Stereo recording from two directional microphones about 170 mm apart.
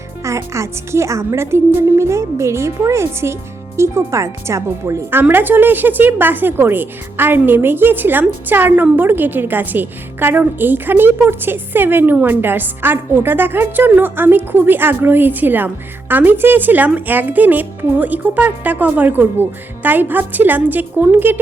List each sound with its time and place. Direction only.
0.3 s a woman's voice: 15° right (ahead or behind)